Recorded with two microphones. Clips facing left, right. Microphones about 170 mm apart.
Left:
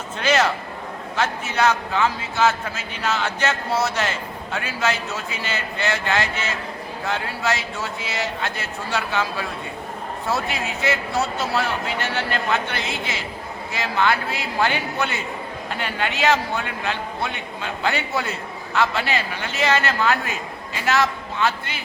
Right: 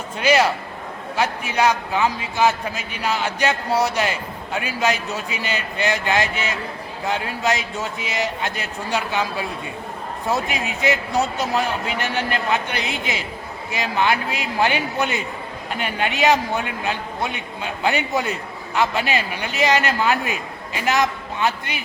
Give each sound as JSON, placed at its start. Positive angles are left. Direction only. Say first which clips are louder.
{"t": 0.2, "sound": "a man's voice", "louder": "right 2 dB", "side_deg": -10}